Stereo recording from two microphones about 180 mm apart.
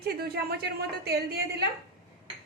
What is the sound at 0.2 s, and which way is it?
A woman's voice, 65° right (ahead or behind).